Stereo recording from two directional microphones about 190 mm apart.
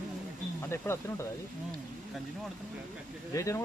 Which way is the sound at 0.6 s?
15° left (ahead or behind).